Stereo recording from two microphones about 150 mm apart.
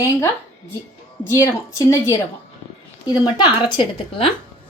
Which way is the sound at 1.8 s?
20° left (ahead or behind).